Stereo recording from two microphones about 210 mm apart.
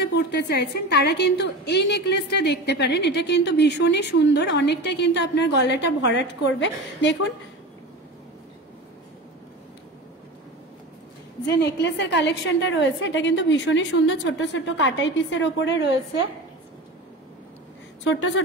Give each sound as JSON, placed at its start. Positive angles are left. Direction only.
{"t": 0.0, "sound": "a woman's voice", "side_deg": 50}
{"t": 11.4, "sound": "a woman's voice", "side_deg": 55}